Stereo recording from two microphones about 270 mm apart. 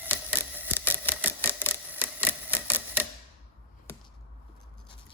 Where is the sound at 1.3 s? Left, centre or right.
Centre.